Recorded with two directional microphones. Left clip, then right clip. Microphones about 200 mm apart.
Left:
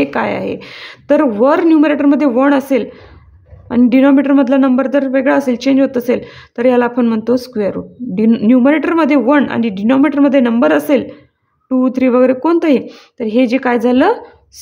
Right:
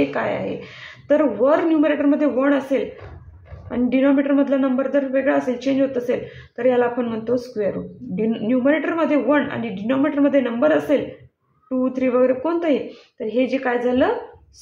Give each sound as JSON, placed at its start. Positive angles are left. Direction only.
{"t": 0.0, "sound": "speech", "side_deg": 50}